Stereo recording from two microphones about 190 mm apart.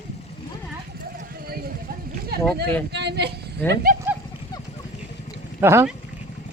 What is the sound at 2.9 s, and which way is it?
Speech, 60° right (ahead or behind).